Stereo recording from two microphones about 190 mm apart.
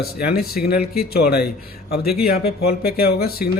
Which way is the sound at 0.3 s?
55° left (ahead or behind).